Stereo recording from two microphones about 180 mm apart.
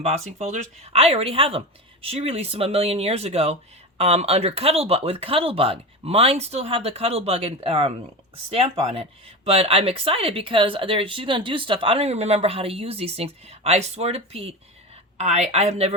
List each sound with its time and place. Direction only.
0.0 s speech: 40° right (ahead or behind)